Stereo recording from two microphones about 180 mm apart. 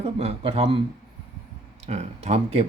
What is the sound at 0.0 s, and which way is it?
Speech, 35° right (ahead or behind).